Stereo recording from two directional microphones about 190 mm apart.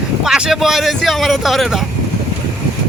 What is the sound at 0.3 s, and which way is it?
Speech, 5° right (ahead or behind).